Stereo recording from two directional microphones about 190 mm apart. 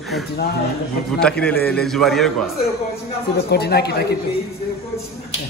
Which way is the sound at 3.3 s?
55° left (ahead or behind).